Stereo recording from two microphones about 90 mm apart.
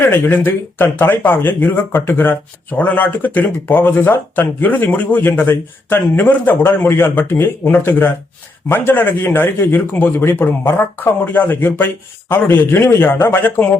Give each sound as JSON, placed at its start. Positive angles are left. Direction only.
{"t": 0.0, "sound": "speech", "side_deg": 25}